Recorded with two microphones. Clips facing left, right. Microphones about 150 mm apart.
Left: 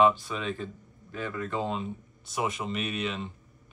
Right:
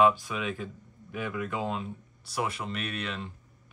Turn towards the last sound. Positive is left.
turn(degrees=0)  # may be behind; listen again after turning